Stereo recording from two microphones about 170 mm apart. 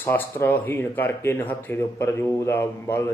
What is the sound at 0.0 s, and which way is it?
A man's voice, 10° left (ahead or behind).